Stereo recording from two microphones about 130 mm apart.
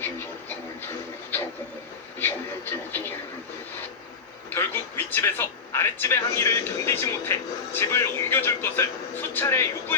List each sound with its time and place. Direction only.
0.0 s a sound: 15° left (ahead or behind)
2.1 s television: 15° left (ahead or behind)
4.4 s a man's voice: 15° left (ahead or behind)